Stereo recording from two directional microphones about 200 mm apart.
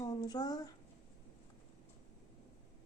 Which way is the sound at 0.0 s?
20° left (ahead or behind).